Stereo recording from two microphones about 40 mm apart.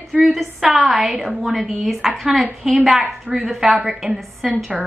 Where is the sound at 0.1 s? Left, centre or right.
Centre.